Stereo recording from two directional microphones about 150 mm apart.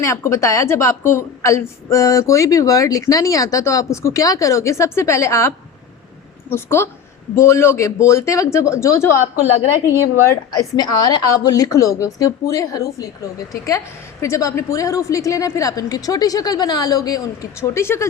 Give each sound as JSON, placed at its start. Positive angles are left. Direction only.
{"t": 0.0, "sound": "a woman's voice", "side_deg": 20}
{"t": 10.2, "sound": "a woman's voice", "side_deg": 25}